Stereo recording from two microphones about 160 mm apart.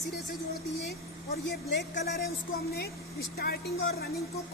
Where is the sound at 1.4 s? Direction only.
90° left.